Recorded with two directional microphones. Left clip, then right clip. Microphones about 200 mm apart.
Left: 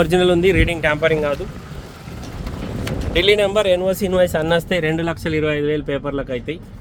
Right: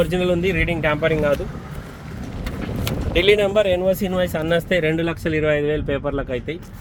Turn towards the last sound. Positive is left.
turn(degrees=-10)  # may be behind; listen again after turning